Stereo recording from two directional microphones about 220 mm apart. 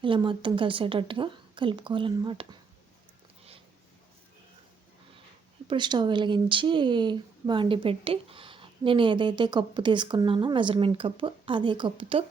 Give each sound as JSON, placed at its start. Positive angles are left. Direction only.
{"t": 0.0, "sound": "speech", "side_deg": -20}
{"t": 5.6, "sound": "speech", "side_deg": -20}